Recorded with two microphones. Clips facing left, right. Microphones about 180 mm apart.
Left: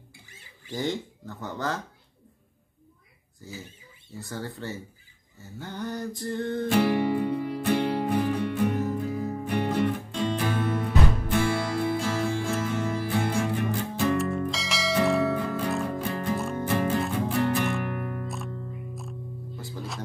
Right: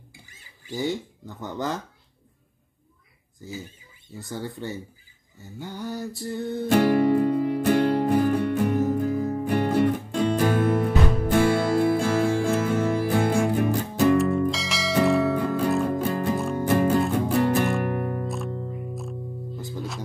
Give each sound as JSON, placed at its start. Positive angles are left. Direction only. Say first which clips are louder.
{"t": 0.7, "sound": "music", "louder": "right 2 dB", "side_deg": -10}
{"t": 4.2, "sound": "music", "louder": "right 3 dB", "side_deg": -15}
{"t": 6.7, "sound": "music", "louder": "right 5 dB", "side_deg": -45}
{"t": 14.1, "sound": "music", "louder": "right 6 dB", "side_deg": 0}
{"t": 16.0, "sound": "music", "louder": "right 5 dB", "side_deg": -40}
{"t": 17.4, "sound": "music", "louder": "right 3 dB", "side_deg": -40}